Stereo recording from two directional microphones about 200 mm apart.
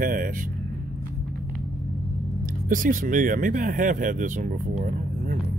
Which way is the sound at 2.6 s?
40° right (ahead or behind).